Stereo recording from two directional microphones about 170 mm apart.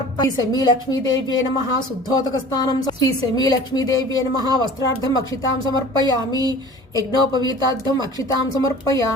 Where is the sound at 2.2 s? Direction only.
20° left (ahead or behind).